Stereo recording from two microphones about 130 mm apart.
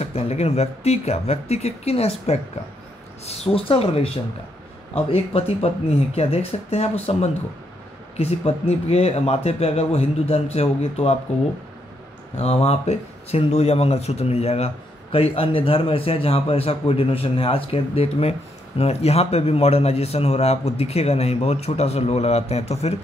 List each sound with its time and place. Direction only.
0.0 s speech: 55° left (ahead or behind)
12.4 s a man's voice: 50° left (ahead or behind)